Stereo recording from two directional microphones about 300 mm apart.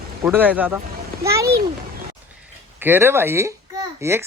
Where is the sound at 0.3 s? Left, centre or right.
Centre.